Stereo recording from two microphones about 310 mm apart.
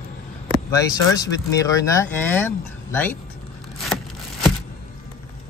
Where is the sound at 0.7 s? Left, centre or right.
Centre.